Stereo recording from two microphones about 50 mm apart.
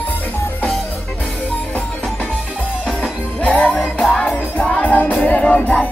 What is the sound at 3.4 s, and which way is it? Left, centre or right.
Music, left.